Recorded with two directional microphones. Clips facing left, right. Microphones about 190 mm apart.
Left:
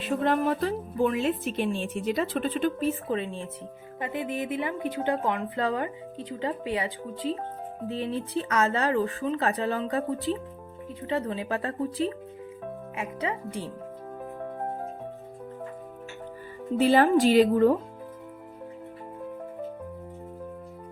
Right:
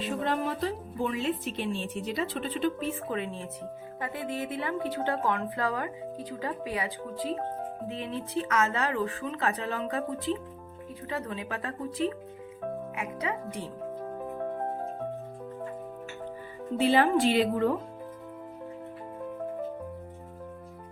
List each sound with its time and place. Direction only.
0.3 s speech: 50° left (ahead or behind)
3.1 s speech: 30° left (ahead or behind)
4.0 s speech: 20° left (ahead or behind)
16.7 s speech: 45° left (ahead or behind)